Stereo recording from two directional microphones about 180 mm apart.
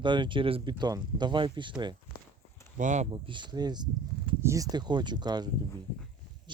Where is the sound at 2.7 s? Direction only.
45° right (ahead or behind).